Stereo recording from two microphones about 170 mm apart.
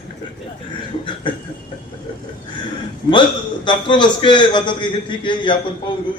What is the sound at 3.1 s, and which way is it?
A man's voice, 30° left (ahead or behind).